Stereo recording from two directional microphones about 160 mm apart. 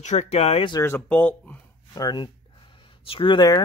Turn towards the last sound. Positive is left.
turn(degrees=25)  # may be behind; listen again after turning